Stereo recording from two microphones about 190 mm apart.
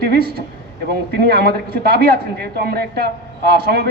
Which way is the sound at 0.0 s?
55° right (ahead or behind).